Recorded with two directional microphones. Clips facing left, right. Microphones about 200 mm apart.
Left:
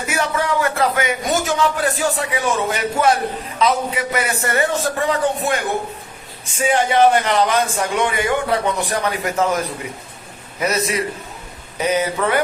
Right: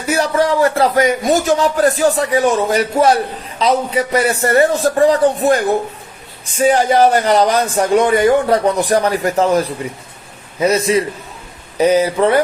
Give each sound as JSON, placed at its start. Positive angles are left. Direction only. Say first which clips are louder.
{"t": 0.1, "sound": "a man's voice", "louder": "right 7 dB", "side_deg": -35}